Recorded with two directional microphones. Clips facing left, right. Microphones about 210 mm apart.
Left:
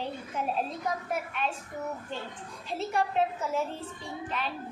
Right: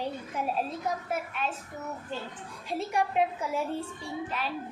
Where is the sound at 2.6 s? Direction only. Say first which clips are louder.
Right 1 dB; 10° right (ahead or behind).